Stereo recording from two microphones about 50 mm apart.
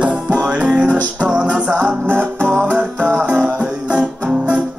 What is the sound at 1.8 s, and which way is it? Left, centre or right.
Music, right.